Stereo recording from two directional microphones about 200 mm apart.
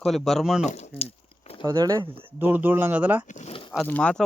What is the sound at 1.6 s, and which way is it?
Speech, 20° right (ahead or behind).